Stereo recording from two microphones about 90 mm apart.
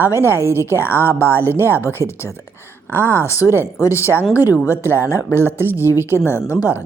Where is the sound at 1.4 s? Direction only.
25° right (ahead or behind).